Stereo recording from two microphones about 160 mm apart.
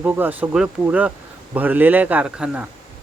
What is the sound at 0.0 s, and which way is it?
Speech, 10° right (ahead or behind).